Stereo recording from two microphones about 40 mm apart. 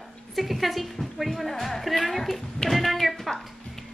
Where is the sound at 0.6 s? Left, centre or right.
Centre.